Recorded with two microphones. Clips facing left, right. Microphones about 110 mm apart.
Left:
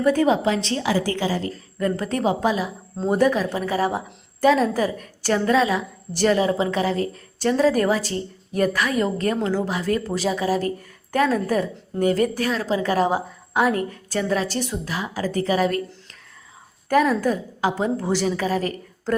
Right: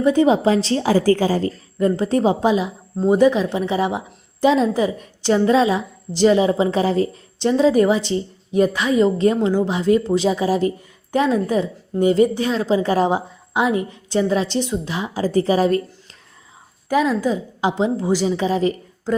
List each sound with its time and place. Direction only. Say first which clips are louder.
0.0 s a woman's voice: right 3 dB; 20° right (ahead or behind)
0.4 s a woman's voice: right 5 dB; 35° right (ahead or behind)
1.5 s a woman's voice: right 5 dB; 25° right (ahead or behind)
3.0 s a woman's voice: right 4 dB; 15° right (ahead or behind)
6.7 s a woman's voice: right 4 dB; 30° right (ahead or behind)
16.9 s a woman's voice: right 1 dB; 15° right (ahead or behind)